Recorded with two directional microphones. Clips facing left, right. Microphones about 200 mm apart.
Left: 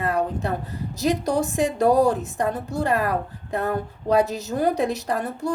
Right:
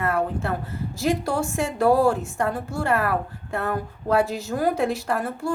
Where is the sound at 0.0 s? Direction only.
15° left (ahead or behind).